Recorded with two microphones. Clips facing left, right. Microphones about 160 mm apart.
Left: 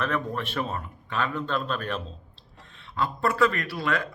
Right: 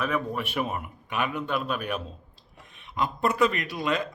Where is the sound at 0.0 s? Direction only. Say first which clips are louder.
Even; 10° right (ahead or behind).